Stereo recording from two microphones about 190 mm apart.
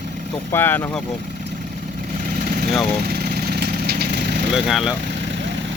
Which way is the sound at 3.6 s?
55° right (ahead or behind).